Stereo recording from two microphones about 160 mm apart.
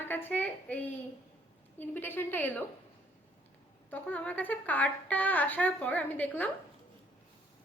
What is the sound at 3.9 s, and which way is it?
A woman's voice, 10° left (ahead or behind).